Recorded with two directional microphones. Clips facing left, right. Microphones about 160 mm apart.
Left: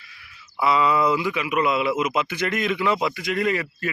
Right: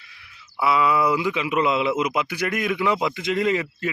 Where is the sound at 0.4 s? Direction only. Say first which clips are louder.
Even; 5° right (ahead or behind).